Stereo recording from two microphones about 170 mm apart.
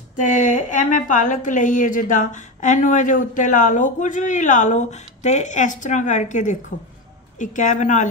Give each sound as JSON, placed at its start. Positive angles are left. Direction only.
{"t": 0.1, "sound": "a woman's voice", "side_deg": 50}